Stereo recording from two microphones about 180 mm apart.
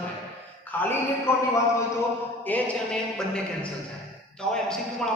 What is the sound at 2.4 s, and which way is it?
A man's voice, 5° left (ahead or behind).